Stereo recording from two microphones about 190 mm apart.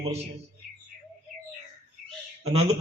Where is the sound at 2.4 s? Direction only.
35° right (ahead or behind).